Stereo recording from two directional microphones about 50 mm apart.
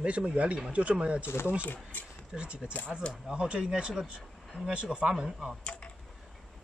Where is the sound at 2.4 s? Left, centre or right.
Right.